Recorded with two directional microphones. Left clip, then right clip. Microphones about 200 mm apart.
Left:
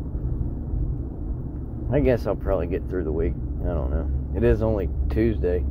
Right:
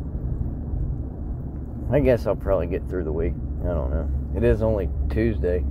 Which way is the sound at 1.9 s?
15° right (ahead or behind).